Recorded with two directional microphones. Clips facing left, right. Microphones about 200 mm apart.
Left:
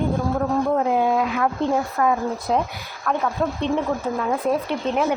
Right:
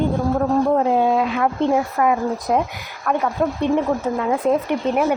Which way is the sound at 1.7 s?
15° right (ahead or behind).